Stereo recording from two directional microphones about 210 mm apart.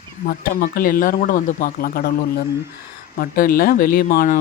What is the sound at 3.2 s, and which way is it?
Speech, 45° left (ahead or behind).